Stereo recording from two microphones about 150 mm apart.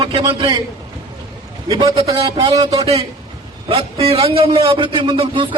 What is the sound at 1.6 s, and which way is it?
A man's voice, 30° right (ahead or behind).